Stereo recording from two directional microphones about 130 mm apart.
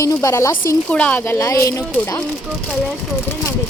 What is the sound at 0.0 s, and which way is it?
Speech, 25° left (ahead or behind).